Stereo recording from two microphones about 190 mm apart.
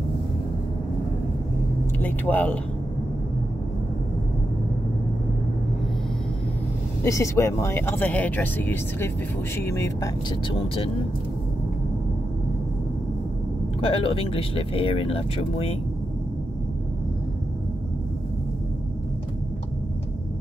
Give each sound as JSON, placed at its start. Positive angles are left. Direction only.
{"t": 2.0, "sound": "speech", "side_deg": 10}
{"t": 7.0, "sound": "speech", "side_deg": 15}
{"t": 13.7, "sound": "speech", "side_deg": 30}